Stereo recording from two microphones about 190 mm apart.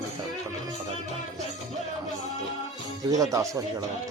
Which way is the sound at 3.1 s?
15° right (ahead or behind).